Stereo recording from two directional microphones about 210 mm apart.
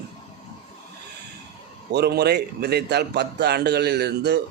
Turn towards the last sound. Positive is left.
turn(degrees=-55)  # may be behind; listen again after turning